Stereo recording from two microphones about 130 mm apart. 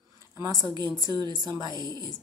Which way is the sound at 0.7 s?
30° right (ahead or behind).